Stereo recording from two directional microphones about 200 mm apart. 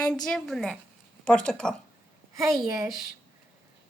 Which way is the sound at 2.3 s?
15° right (ahead or behind).